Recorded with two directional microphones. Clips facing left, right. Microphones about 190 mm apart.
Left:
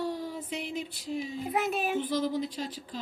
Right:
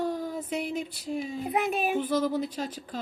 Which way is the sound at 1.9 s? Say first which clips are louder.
Right 3 dB; 45° right (ahead or behind).